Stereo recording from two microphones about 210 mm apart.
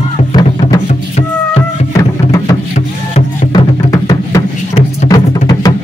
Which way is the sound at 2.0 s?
15° left (ahead or behind).